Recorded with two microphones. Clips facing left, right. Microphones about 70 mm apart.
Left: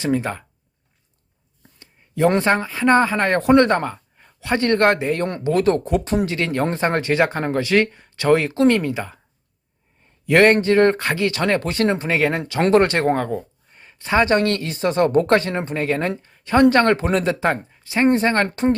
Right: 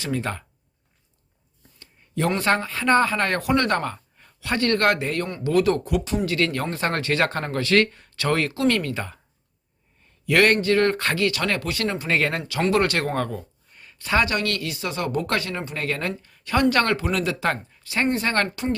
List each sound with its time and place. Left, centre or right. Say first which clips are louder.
0.0 s speech: left 6 dB; centre
1.8 s a sound: left 7 dB; left
2.4 s speech: left 4 dB; centre
10.2 s speech: left 4 dB; left
12.0 s speech: left 3 dB; centre
12.7 s speech: left 7 dB; left